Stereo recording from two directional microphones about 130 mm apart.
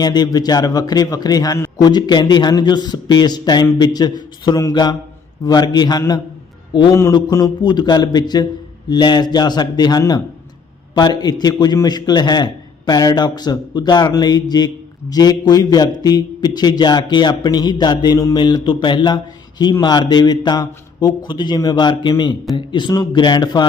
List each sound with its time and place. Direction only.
0.0 s a man's voice: 30° left (ahead or behind)